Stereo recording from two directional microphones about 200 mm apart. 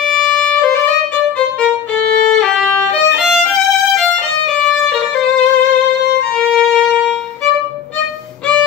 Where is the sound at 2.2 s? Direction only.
5° left (ahead or behind).